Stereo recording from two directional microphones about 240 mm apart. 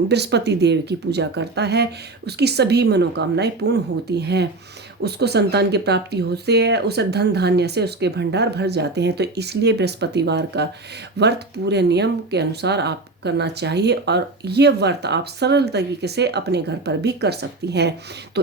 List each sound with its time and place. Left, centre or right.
0.1 s speech: right